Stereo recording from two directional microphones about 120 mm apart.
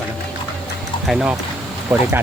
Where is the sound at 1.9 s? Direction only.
20° right (ahead or behind).